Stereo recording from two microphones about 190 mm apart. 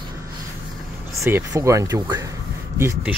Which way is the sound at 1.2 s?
15° right (ahead or behind).